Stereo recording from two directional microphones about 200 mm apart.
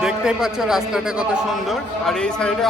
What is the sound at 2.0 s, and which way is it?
Speech, 5° left (ahead or behind).